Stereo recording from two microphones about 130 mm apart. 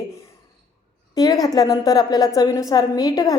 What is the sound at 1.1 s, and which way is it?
A woman's voice, 30° left (ahead or behind).